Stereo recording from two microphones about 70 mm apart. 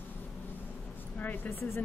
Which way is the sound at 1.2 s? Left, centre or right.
Left.